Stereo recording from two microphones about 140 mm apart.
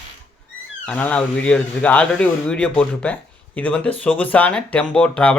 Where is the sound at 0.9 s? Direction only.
10° left (ahead or behind).